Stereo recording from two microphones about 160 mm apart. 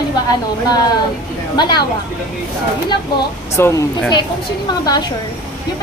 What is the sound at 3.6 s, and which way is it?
Speech, 20° left (ahead or behind).